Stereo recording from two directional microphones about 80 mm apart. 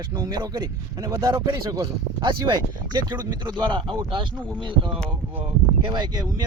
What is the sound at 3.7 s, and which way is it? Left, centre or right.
Speech, right.